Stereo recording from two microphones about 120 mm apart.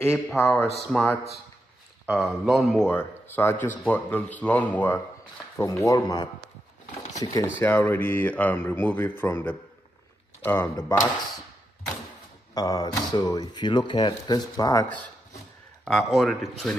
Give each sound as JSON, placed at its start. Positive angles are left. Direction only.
{"t": 0.4, "sound": "speech", "side_deg": 20}
{"t": 0.7, "sound": "speech", "side_deg": 5}
{"t": 2.0, "sound": "speech", "side_deg": -5}
{"t": 2.9, "sound": "speech", "side_deg": 15}
{"t": 5.6, "sound": "speech", "side_deg": 25}
{"t": 7.5, "sound": "speech", "side_deg": 15}
{"t": 12.5, "sound": "speech", "side_deg": 30}
{"t": 15.8, "sound": "speech", "side_deg": 0}